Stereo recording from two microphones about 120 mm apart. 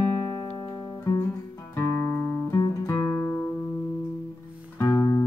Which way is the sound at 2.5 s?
25° left (ahead or behind).